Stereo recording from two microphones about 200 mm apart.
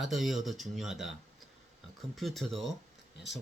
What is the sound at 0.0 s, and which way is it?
Speech, centre (ahead or behind).